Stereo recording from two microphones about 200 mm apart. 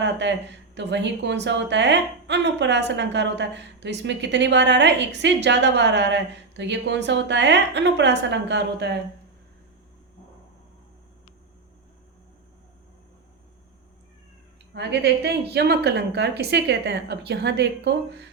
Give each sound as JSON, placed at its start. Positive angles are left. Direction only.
{"t": 0.0, "sound": "a woman's voice", "side_deg": -60}
{"t": 14.7, "sound": "a woman's voice", "side_deg": -55}